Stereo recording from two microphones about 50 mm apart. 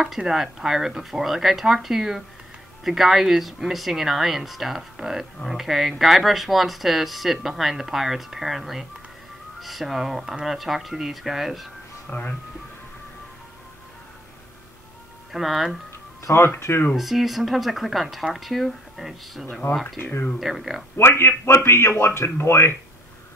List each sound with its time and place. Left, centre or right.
0.2 s speech: centre
12.1 s speech: left
15.3 s speech: centre
16.3 s a man's voice: left
16.9 s speech: centre
20.9 s a man's voice: left